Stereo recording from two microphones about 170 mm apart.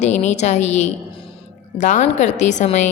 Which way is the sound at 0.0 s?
40° left (ahead or behind).